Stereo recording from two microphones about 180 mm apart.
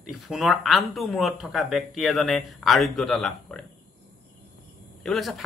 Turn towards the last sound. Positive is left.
turn(degrees=0)  # may be behind; listen again after turning